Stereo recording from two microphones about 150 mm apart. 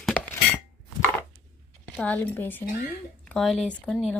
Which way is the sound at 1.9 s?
10° left (ahead or behind).